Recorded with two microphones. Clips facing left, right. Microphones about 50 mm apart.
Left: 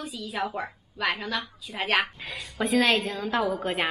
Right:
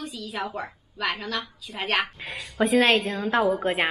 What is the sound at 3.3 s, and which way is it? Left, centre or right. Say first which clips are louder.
Speech: right 5 dB; right.